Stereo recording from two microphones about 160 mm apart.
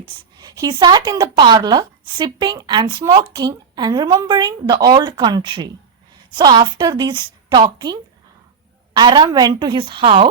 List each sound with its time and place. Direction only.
0.3 s speech: 25° right (ahead or behind)